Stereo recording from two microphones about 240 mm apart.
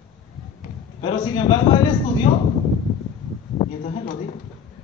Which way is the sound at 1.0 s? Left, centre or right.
Centre.